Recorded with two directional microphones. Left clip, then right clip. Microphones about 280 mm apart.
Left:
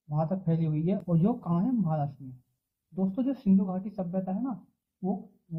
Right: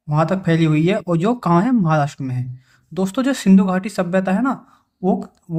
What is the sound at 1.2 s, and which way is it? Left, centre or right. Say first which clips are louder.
Speech: right 15 dB; right.